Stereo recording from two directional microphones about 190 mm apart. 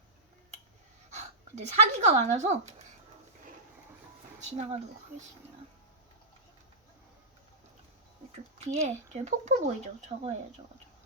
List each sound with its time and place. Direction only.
1.1 s speech: 35° right (ahead or behind)
4.4 s speech: 35° right (ahead or behind)
8.5 s speech: 35° right (ahead or behind)